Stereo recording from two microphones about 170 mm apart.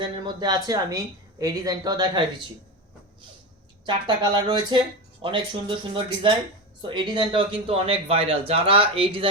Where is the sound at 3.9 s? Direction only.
25° right (ahead or behind).